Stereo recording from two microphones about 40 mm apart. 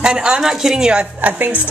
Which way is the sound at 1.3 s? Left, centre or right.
Right.